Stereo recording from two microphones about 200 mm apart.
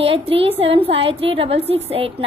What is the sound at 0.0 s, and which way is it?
A woman's voice, 30° right (ahead or behind).